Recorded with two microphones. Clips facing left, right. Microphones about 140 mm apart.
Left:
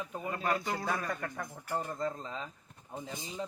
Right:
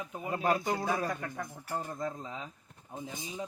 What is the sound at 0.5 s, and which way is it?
Speech, 15° right (ahead or behind).